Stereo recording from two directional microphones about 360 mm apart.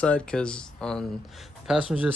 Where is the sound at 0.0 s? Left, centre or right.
Centre.